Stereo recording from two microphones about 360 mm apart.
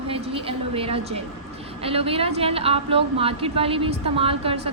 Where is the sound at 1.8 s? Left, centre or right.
Centre.